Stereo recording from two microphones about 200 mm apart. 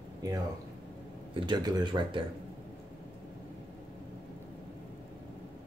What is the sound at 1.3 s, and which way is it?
Speech, 20° right (ahead or behind).